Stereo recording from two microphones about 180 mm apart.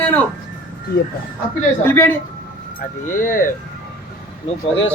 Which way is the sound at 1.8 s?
10° left (ahead or behind).